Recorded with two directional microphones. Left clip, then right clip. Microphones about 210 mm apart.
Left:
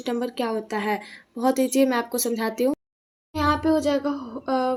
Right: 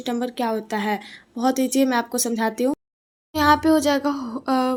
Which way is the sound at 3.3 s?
35° right (ahead or behind).